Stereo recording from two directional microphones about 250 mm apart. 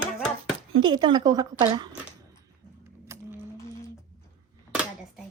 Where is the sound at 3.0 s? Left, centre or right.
Centre.